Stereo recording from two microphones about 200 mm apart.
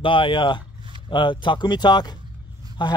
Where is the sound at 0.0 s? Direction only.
25° left (ahead or behind).